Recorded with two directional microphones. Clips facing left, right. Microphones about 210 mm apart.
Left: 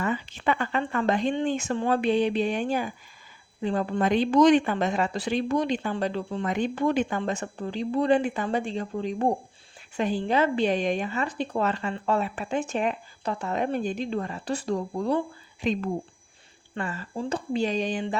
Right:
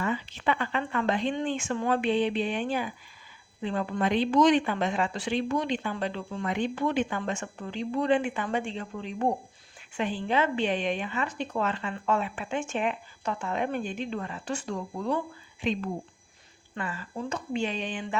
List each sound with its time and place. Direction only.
0.0 s speech: 45° left (ahead or behind)